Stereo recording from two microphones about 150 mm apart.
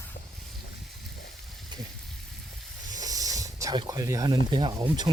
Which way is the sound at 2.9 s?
25° right (ahead or behind).